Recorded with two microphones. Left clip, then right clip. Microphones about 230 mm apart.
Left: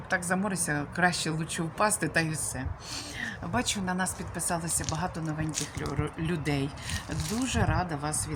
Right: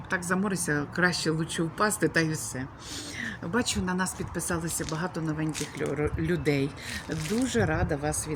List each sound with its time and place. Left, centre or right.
0.1 s speech: centre